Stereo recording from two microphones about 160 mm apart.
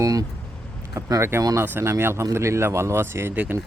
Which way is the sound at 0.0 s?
20° right (ahead or behind).